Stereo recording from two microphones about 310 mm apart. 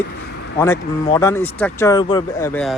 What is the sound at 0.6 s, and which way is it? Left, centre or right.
Speech, centre.